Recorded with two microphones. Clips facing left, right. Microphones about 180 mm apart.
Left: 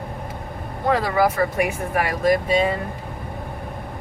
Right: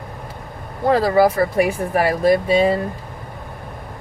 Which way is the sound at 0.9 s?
35° right (ahead or behind).